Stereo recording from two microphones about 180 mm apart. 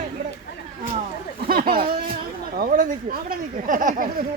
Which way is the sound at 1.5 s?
55° right (ahead or behind).